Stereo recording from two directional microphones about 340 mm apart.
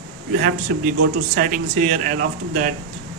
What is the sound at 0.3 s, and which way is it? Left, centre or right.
A man's voice, right.